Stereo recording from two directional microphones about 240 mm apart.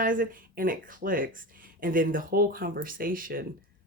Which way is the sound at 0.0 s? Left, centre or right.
Right.